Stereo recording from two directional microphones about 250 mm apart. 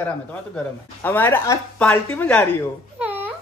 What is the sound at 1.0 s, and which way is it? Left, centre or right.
Speech, centre.